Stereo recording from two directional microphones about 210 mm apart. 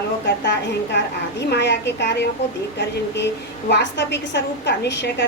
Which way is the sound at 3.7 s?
55° left (ahead or behind).